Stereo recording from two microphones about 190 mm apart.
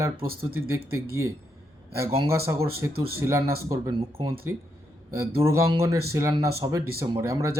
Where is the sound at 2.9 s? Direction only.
55° right (ahead or behind).